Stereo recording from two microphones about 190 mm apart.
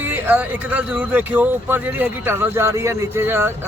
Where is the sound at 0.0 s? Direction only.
10° right (ahead or behind).